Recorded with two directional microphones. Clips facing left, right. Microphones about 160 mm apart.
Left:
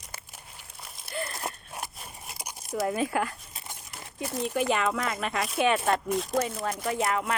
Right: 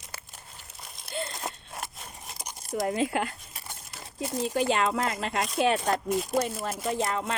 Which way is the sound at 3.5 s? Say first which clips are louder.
Even; 20° left (ahead or behind).